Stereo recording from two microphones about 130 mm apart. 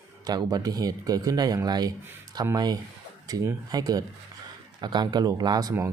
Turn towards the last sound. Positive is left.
turn(degrees=-30)  # may be behind; listen again after turning